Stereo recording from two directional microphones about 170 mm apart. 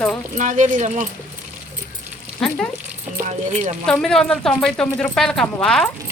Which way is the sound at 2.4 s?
5° left (ahead or behind).